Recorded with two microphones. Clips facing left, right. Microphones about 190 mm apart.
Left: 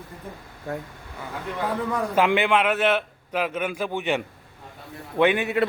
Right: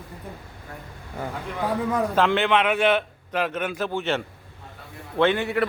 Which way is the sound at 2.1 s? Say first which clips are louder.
Left 2 dB; 10° left (ahead or behind).